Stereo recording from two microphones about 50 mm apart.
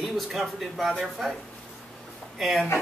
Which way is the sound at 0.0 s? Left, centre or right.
Centre.